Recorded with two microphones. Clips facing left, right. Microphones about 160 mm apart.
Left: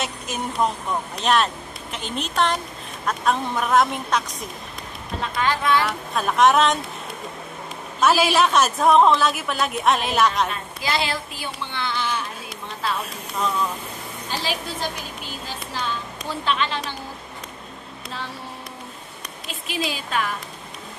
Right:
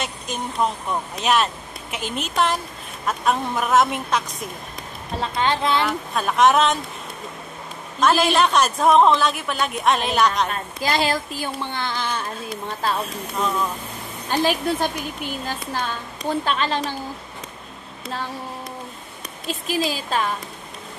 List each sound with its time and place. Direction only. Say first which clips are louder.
0.0 s a woman's voice: even; centre (ahead or behind)
5.2 s speech: right 1 dB; 25° right (ahead or behind)
5.9 s a woman's voice: right 1 dB; centre (ahead or behind)
8.0 s a woman's voice: even; 5° left (ahead or behind)
10.5 s a woman's voice: right 3 dB; 45° right (ahead or behind)
14.3 s speech: right 8 dB; 50° right (ahead or behind)
19.4 s a woman's voice: right 5 dB; 40° right (ahead or behind)